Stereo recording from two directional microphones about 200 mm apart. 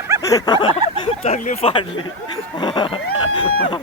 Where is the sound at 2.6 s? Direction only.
25° left (ahead or behind).